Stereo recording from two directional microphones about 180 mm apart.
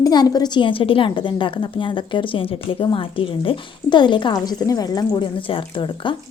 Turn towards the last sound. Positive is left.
turn(degrees=25)  # may be behind; listen again after turning